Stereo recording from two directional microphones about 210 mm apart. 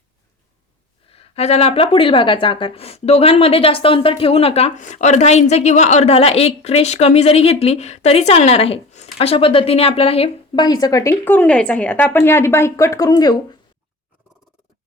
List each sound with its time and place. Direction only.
1.1 s a woman's voice: 30° left (ahead or behind)